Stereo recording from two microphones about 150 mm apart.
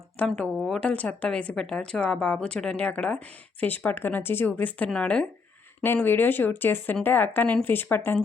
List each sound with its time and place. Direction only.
0.3 s speech: 5° left (ahead or behind)